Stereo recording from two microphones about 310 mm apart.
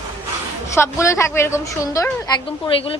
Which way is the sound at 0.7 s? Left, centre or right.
Centre.